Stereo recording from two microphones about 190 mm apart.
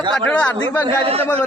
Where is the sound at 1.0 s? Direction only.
30° right (ahead or behind).